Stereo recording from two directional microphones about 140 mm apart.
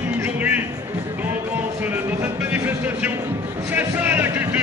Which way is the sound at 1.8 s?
15° right (ahead or behind).